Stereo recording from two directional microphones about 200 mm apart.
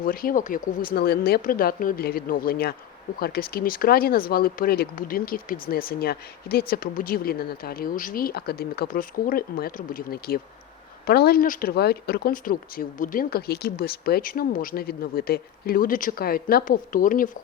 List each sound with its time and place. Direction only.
0.0 s speech: 45° left (ahead or behind)